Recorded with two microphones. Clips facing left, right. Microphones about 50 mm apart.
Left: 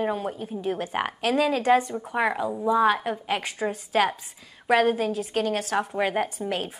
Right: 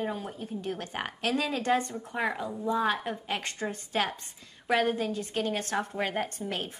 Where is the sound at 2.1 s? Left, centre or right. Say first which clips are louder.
Left 6 dB; left.